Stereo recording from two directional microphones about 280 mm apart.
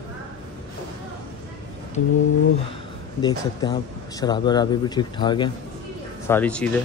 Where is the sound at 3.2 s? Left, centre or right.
Centre.